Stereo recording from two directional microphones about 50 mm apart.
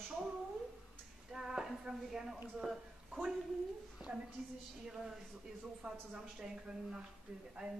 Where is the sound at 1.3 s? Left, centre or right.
Centre.